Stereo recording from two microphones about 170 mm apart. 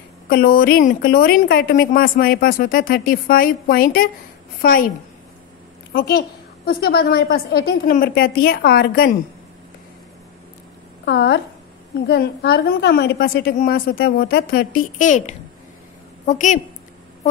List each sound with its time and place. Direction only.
0.3 s a woman's voice: 60° left (ahead or behind)
5.9 s a woman's voice: 60° left (ahead or behind)
11.1 s a woman's voice: 85° left; by 16.5 s 45° left (ahead or behind)